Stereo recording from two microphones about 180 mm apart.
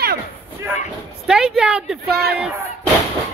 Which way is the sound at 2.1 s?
60° right (ahead or behind).